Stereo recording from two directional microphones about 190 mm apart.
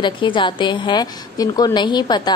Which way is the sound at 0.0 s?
25° left (ahead or behind).